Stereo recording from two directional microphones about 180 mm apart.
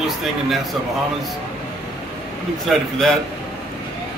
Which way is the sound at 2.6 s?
Centre (ahead or behind).